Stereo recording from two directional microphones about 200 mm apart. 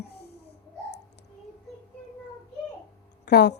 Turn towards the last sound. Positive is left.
turn(degrees=55)  # may be behind; listen again after turning